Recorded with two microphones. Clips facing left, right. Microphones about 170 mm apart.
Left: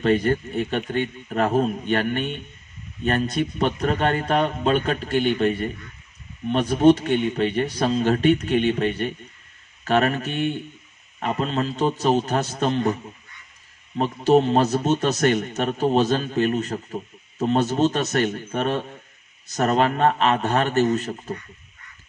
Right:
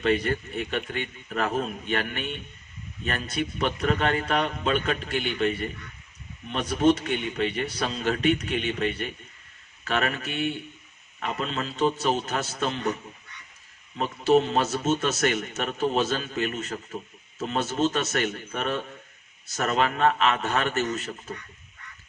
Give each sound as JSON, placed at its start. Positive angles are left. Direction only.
{"t": 0.0, "sound": "speech", "side_deg": 40}
{"t": 13.9, "sound": "speech", "side_deg": 40}